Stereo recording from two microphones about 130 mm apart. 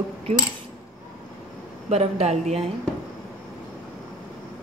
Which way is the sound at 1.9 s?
55° right (ahead or behind).